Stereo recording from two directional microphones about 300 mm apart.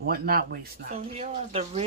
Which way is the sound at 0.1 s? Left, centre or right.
Right.